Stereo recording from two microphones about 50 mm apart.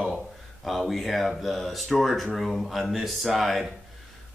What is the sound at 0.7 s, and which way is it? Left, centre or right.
Speech, centre.